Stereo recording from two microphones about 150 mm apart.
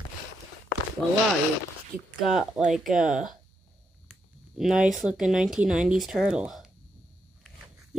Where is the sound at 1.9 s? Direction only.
20° right (ahead or behind).